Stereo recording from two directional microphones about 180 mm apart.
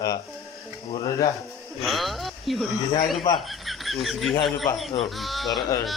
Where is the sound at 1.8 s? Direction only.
Centre (ahead or behind).